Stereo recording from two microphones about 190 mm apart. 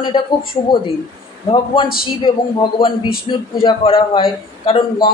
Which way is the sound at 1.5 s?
25° left (ahead or behind).